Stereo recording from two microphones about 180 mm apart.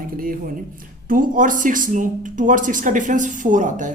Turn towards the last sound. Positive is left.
turn(degrees=-45)  # may be behind; listen again after turning